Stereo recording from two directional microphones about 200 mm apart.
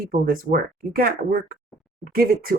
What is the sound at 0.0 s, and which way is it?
Speech, 45° right (ahead or behind).